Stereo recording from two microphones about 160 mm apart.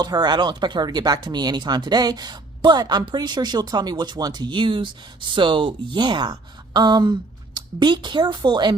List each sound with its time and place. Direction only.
0.0 s speech: 25° right (ahead or behind)